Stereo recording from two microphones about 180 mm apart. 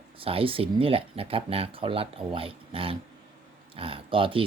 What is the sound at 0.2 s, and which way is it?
Speech, 30° right (ahead or behind).